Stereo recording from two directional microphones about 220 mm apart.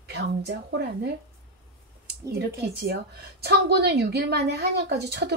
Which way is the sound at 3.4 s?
45° right (ahead or behind).